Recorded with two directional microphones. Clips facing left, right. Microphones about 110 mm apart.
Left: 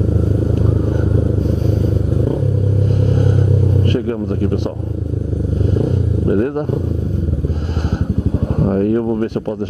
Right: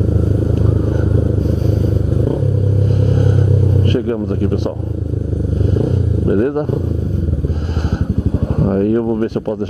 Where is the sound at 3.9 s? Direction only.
15° right (ahead or behind).